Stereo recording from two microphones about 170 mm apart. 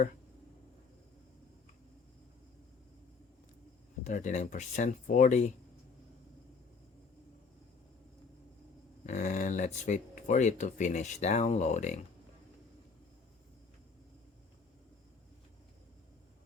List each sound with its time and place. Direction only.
4.0 s speech: 45° left (ahead or behind)
9.0 s speech: 50° left (ahead or behind)